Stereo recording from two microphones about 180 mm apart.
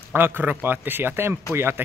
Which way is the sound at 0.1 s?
10° right (ahead or behind).